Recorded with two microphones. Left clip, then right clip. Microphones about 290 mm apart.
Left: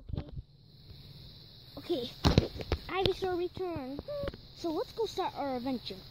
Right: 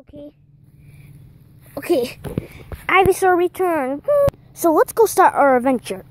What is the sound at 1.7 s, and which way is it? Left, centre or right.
A child's voice, centre.